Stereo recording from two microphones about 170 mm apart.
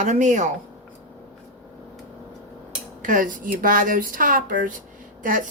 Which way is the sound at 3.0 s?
50° right (ahead or behind).